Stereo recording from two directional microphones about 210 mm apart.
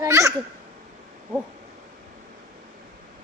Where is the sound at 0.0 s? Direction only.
15° right (ahead or behind).